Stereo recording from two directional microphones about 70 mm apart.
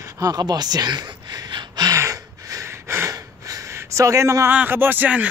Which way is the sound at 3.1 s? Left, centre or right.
Right.